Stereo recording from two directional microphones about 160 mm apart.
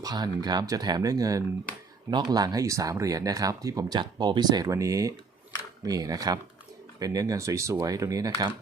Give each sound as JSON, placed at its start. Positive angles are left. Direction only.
{"t": 0.0, "sound": "speech", "side_deg": -25}